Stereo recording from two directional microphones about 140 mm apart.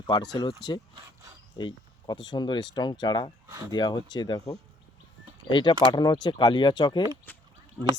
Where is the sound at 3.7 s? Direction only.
30° left (ahead or behind).